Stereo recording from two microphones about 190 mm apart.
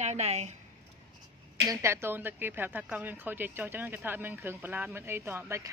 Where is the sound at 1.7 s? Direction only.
15° right (ahead or behind).